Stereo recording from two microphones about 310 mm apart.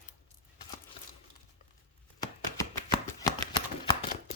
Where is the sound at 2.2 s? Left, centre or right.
Centre.